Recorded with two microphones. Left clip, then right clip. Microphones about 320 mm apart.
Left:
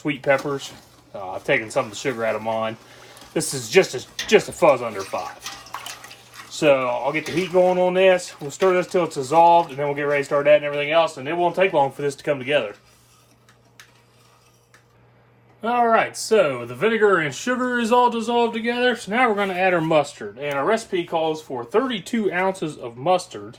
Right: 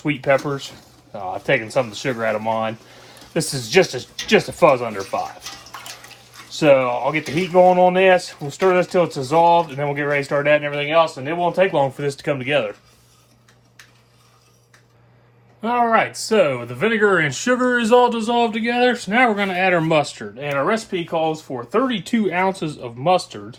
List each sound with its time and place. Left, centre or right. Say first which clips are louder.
0.0 s speech: right 2 dB; right
6.5 s speech: right 3 dB; centre
15.6 s speech: right 1 dB; right